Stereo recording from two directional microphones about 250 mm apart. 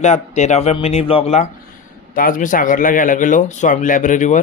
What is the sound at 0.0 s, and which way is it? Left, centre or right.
A man's voice, left.